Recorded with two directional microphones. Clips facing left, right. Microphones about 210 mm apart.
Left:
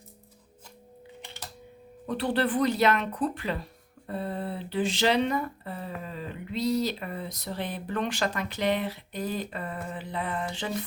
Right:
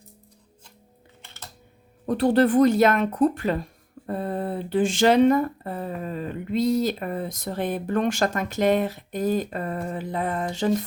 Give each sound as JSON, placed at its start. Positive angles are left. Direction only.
{"t": 1.2, "sound": "typing", "side_deg": 15}
{"t": 2.0, "sound": "speech", "side_deg": -45}